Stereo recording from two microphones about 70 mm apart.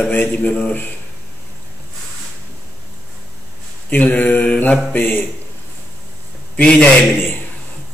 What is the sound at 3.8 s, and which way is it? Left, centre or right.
Mantra, left.